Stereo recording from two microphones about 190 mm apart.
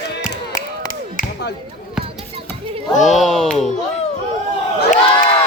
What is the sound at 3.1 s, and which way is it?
Speech, centre (ahead or behind).